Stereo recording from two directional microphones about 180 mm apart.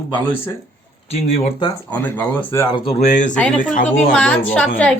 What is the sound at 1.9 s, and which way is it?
Speech, 10° left (ahead or behind).